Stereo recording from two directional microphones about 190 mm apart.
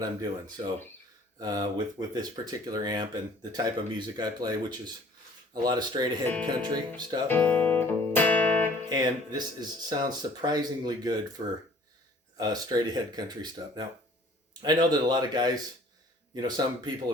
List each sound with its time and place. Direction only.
0.0 s speech: 20° right (ahead or behind)
6.2 s speech: 5° left (ahead or behind)
6.6 s speech: 20° right (ahead or behind)
7.3 s music: 10° left (ahead or behind)
8.9 s speech: 20° right (ahead or behind)
12.4 s speech: 20° right (ahead or behind)